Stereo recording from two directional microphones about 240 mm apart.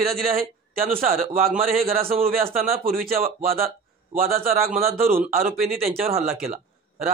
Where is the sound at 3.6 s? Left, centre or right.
Right.